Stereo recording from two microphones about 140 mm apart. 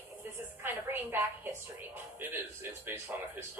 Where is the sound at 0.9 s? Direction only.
15° right (ahead or behind).